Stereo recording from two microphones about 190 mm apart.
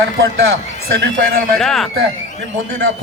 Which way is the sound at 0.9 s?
65° right (ahead or behind).